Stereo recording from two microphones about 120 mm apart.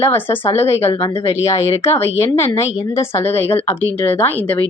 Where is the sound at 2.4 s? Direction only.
25° left (ahead or behind).